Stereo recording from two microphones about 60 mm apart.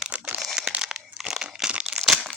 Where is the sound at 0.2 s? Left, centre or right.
Centre.